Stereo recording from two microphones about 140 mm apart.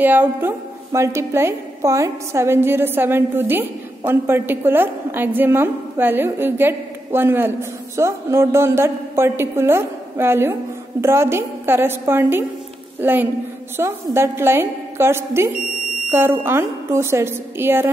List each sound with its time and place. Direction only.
0.0 s a woman's voice: 15° right (ahead or behind)